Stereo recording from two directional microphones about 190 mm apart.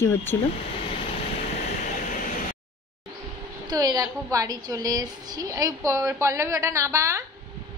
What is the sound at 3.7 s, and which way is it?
A woman's voice, 20° right (ahead or behind).